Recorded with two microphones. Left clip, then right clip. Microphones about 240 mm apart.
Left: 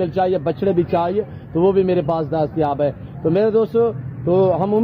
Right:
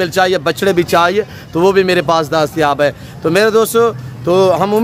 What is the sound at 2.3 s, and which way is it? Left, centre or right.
Speech, right.